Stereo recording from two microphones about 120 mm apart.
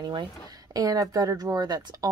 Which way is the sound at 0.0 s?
40° right (ahead or behind).